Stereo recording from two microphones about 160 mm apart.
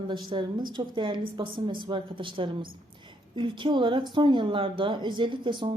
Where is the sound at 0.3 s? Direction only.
30° right (ahead or behind).